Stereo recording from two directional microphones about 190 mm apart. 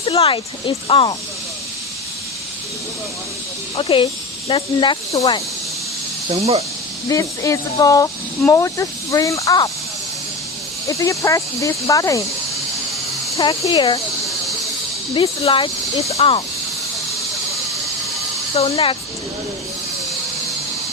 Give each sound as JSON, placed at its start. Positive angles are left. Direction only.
{"t": 0.0, "sound": "speech", "side_deg": 30}
{"t": 3.8, "sound": "speech", "side_deg": 25}
{"t": 6.3, "sound": "speech", "side_deg": -35}
{"t": 7.1, "sound": "speech", "side_deg": 15}
{"t": 10.8, "sound": "speech", "side_deg": 15}
{"t": 13.5, "sound": "speech", "side_deg": 25}
{"t": 15.1, "sound": "speech", "side_deg": 30}
{"t": 18.5, "sound": "speech", "side_deg": 30}